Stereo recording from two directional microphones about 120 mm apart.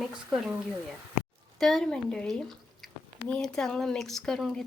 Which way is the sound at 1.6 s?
Centre (ahead or behind).